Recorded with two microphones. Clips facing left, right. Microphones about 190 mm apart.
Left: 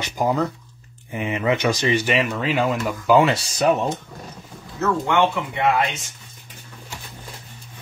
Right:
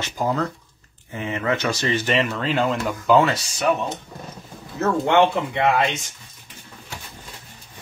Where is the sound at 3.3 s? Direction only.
35° left (ahead or behind).